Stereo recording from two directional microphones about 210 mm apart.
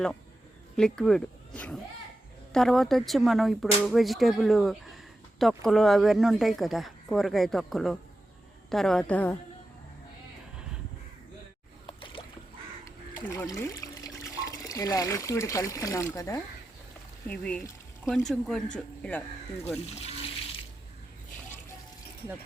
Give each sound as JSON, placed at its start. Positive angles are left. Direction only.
{"t": 0.8, "sound": "speech", "side_deg": 5}
{"t": 11.9, "sound": "boat", "side_deg": 25}
{"t": 12.8, "sound": "speech", "side_deg": 10}